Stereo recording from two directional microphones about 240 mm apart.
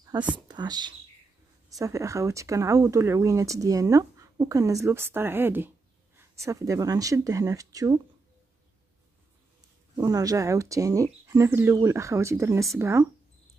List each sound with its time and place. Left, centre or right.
0.0 s whispering: centre
0.5 s speech: centre
9.9 s speech: centre